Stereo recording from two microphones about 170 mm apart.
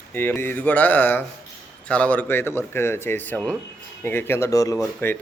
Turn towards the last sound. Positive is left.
turn(degrees=15)  # may be behind; listen again after turning